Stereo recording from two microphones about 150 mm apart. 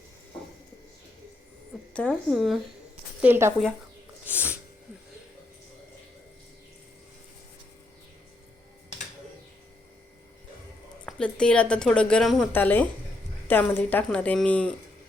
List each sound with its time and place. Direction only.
1.9 s a woman's voice: 5° left (ahead or behind)
3.2 s speech: 15° right (ahead or behind)
4.3 s sneeze: 10° right (ahead or behind)
11.0 s a woman's voice: 5° left (ahead or behind)